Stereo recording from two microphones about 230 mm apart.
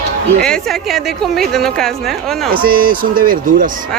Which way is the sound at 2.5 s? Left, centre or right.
Right.